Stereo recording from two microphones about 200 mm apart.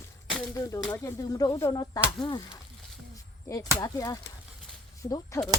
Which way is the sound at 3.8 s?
20° left (ahead or behind).